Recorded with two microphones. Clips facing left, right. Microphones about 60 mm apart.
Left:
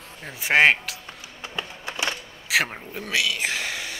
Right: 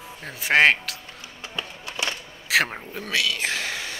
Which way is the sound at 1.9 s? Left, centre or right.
Centre.